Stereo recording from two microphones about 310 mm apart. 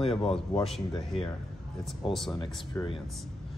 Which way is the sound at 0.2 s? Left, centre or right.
Centre.